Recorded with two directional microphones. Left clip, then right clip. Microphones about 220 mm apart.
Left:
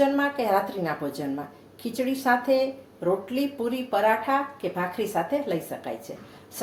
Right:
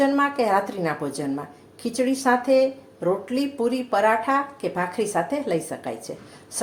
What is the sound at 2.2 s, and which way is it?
Speech, 30° right (ahead or behind).